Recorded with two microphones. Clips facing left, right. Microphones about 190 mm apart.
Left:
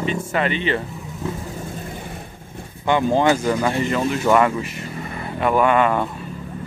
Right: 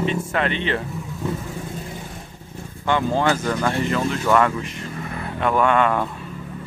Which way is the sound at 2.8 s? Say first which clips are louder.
Left 3 dB; 15° left (ahead or behind).